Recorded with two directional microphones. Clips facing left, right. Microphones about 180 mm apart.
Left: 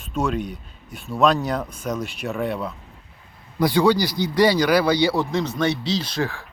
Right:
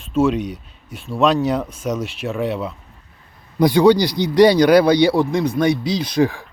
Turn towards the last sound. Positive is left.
turn(degrees=-15)  # may be behind; listen again after turning